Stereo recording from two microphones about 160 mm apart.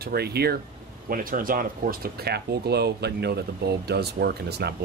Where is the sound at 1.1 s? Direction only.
60° right (ahead or behind).